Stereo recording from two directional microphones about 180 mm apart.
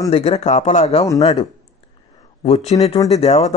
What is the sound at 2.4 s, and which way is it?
Speech, 35° left (ahead or behind).